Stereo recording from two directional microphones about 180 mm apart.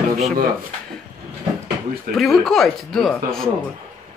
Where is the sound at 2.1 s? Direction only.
Centre (ahead or behind).